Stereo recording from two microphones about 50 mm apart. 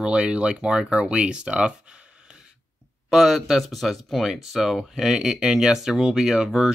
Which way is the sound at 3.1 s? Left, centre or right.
Centre.